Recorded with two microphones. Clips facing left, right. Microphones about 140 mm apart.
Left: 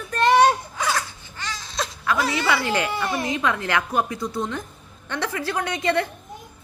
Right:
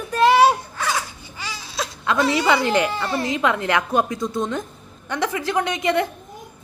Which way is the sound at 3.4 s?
20° right (ahead or behind).